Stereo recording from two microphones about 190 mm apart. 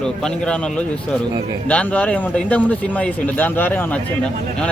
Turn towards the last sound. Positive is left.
turn(degrees=10)  # may be behind; listen again after turning